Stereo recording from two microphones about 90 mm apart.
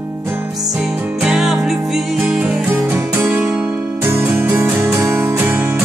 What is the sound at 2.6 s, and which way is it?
Music, 25° right (ahead or behind).